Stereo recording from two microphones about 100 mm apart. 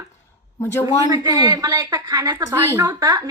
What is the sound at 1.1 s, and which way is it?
A woman's voice, 40° right (ahead or behind).